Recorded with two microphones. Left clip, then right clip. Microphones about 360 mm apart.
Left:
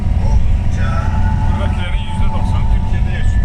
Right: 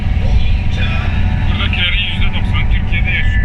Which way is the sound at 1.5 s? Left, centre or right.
Right.